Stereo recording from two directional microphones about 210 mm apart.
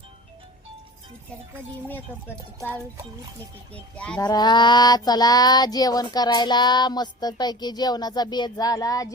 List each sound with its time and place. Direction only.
3.9 s speech: 5° left (ahead or behind)
4.2 s child singing: 20° left (ahead or behind)